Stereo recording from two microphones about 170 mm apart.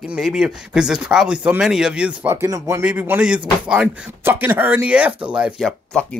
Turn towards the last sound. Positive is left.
turn(degrees=0)  # may be behind; listen again after turning